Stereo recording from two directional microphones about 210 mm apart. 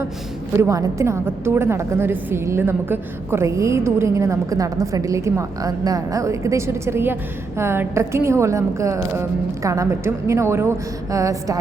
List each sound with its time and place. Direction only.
0.6 s a woman's voice: 15° right (ahead or behind)